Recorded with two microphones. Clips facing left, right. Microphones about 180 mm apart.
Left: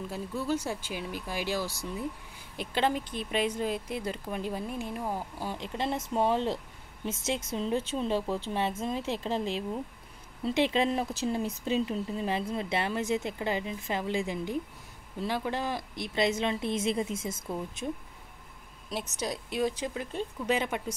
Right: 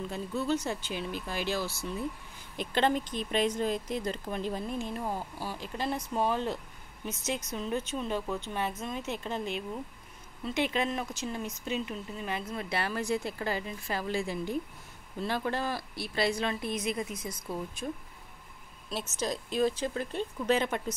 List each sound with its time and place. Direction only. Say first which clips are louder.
0.1 s speech: even; 10° left (ahead or behind)
18.9 s speech: even; 15° left (ahead or behind)